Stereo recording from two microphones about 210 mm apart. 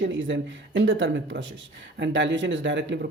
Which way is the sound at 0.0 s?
60° right (ahead or behind).